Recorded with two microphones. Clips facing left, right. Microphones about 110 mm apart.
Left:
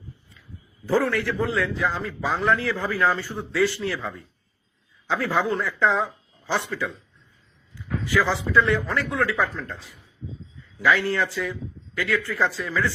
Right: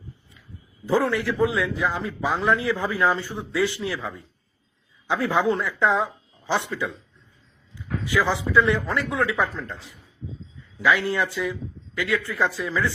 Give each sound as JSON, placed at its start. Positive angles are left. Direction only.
{"t": 0.9, "sound": "a man's voice", "side_deg": -15}
{"t": 11.0, "sound": "a man's voice", "side_deg": -20}